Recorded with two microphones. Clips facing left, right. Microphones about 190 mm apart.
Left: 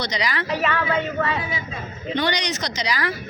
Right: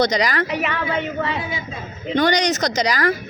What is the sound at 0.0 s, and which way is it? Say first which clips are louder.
Speech: right 7 dB; 45° right (ahead or behind).